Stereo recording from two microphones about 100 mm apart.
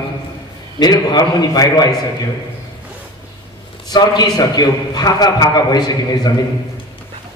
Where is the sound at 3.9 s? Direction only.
40° left (ahead or behind).